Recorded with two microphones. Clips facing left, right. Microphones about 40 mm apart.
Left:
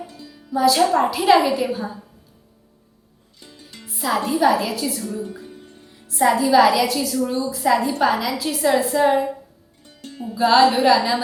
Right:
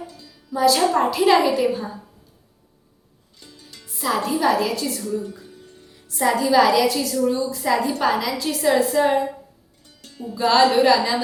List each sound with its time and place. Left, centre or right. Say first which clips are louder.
0.1 s music: left 4 dB; left
0.5 s a woman's voice: left 1 dB; centre
3.4 s music: left 2 dB; left
3.8 s a woman's voice: left 1 dB; centre
5.0 s music: right 2 dB; left
6.1 s a woman's voice: left 2 dB; centre
9.8 s music: left 2 dB; left
10.3 s a woman's voice: left 1 dB; centre